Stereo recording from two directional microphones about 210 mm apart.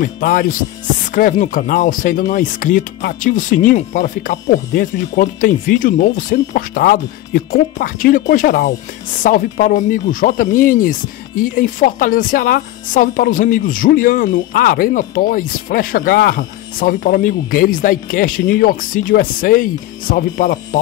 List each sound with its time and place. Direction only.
0.0 s speech: 40° left (ahead or behind)